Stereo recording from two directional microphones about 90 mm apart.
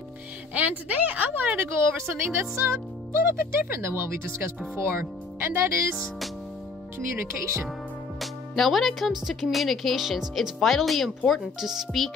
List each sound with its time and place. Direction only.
0.6 s a woman's voice: 15° right (ahead or behind)
7.0 s speech: 30° right (ahead or behind)
8.2 s speech: centre (ahead or behind)